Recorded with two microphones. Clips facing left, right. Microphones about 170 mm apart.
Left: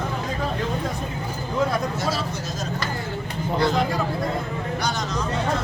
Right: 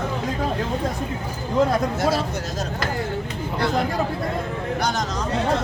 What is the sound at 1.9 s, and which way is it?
Speech, 55° right (ahead or behind).